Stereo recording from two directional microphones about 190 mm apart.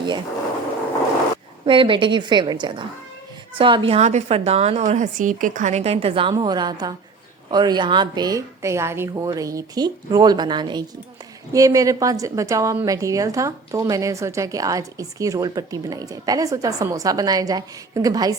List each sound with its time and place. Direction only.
1.6 s a woman's voice: 25° right (ahead or behind)